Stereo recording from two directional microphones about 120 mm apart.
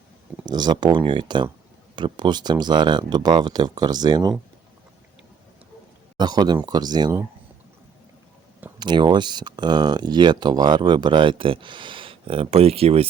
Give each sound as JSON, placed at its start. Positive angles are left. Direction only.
{"t": 0.4, "sound": "speech", "side_deg": -35}
{"t": 6.1, "sound": "speech", "side_deg": -35}
{"t": 8.8, "sound": "speech", "side_deg": -40}